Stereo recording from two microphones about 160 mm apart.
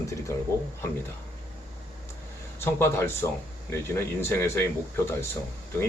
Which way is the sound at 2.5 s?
15° left (ahead or behind).